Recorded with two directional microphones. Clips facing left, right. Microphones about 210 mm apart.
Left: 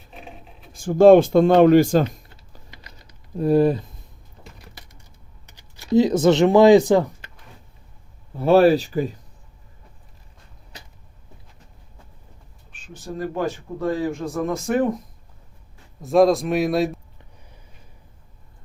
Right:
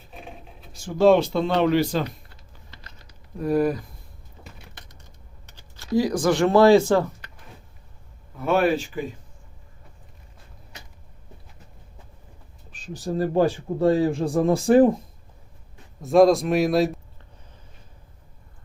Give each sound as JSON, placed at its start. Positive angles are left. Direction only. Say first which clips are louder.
{"t": 0.7, "sound": "speech", "louder": "left 6 dB", "side_deg": 50}
{"t": 3.3, "sound": "speech", "louder": "left 4 dB", "side_deg": 30}
{"t": 4.6, "sound": "typing", "louder": "left 1 dB", "side_deg": 10}
{"t": 5.5, "sound": "speech", "louder": "left 5 dB", "side_deg": 15}
{"t": 8.4, "sound": "speech", "louder": "left 6 dB", "side_deg": 30}
{"t": 10.7, "sound": "vehicle", "louder": "left 2 dB", "side_deg": 35}
{"t": 12.7, "sound": "speech", "louder": "right 5 dB", "side_deg": -40}
{"t": 16.0, "sound": "speech", "louder": "even", "side_deg": 0}